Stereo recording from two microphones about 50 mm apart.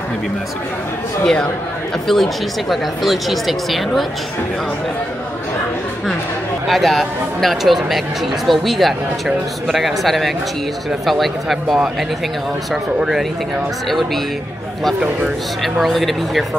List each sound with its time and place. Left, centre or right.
1.2 s a man's voice: centre
2.0 s speech: centre
6.7 s speech: centre
13.8 s speech: centre
15.6 s speech: centre